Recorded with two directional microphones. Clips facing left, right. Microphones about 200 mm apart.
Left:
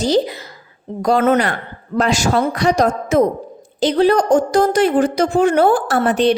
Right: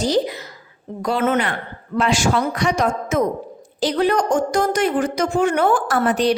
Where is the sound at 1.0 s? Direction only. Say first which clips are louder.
Left 5 dB; 40° left (ahead or behind).